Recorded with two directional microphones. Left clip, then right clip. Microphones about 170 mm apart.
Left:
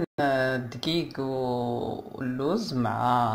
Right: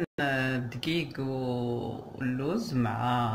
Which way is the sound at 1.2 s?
35° left (ahead or behind).